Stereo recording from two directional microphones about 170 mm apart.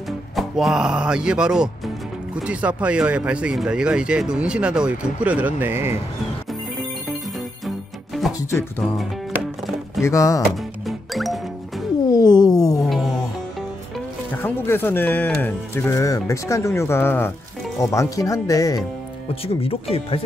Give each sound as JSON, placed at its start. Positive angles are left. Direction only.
{"t": 0.4, "sound": "speech", "side_deg": -5}
{"t": 7.6, "sound": "music", "side_deg": 0}
{"t": 8.5, "sound": "speech", "side_deg": 10}
{"t": 10.0, "sound": "speech", "side_deg": 20}
{"t": 10.5, "sound": "music", "side_deg": 0}
{"t": 12.1, "sound": "music", "side_deg": 20}
{"t": 14.4, "sound": "speech", "side_deg": 10}
{"t": 19.4, "sound": "speech", "side_deg": 35}